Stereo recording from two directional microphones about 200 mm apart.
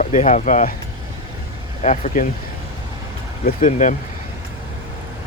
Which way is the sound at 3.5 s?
40° left (ahead or behind).